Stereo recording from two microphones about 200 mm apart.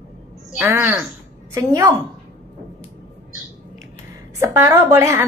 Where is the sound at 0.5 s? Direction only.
10° right (ahead or behind).